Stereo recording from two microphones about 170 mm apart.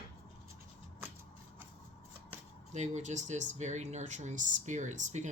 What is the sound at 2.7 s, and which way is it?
Speech, 45° right (ahead or behind).